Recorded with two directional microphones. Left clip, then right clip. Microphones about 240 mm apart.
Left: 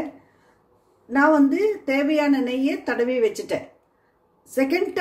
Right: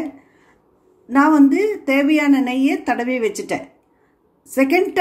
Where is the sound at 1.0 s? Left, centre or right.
Right.